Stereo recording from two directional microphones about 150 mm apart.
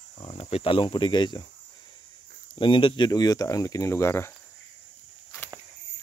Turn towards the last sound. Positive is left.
turn(degrees=15)  # may be behind; listen again after turning